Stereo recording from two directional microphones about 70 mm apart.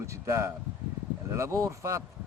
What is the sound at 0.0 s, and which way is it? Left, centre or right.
Speech, right.